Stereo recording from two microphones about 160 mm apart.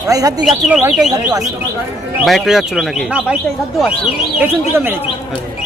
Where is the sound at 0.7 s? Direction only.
5° right (ahead or behind).